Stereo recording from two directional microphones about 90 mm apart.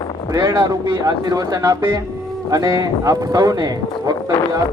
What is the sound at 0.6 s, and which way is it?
Speech, 45° right (ahead or behind).